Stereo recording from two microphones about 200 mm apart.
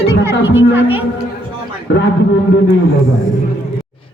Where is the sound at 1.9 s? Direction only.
65° left (ahead or behind).